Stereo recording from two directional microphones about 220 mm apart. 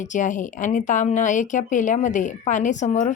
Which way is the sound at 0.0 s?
35° left (ahead or behind).